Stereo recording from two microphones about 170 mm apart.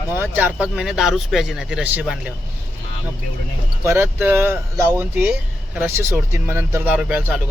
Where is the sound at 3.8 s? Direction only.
15° right (ahead or behind).